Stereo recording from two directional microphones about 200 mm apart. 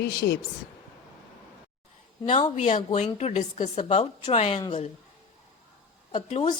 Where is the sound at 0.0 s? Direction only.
50° left (ahead or behind).